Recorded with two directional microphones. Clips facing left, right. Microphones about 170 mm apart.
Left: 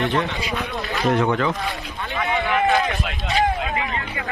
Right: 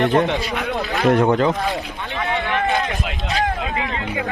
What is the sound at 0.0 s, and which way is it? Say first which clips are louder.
Speech: right 5 dB; 40° right (ahead or behind).